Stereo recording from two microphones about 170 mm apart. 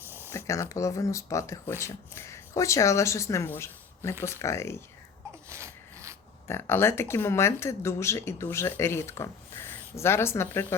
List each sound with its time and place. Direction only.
0.3 s speech: 15° left (ahead or behind)
5.5 s a sound: 15° right (ahead or behind)
6.5 s speech: 15° left (ahead or behind)